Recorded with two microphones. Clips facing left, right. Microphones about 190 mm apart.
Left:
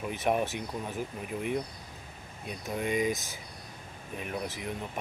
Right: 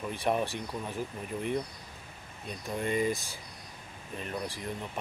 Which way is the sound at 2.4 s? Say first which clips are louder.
Left 1 dB; 5° left (ahead or behind).